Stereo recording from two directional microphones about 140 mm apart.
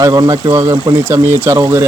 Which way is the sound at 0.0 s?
25° right (ahead or behind).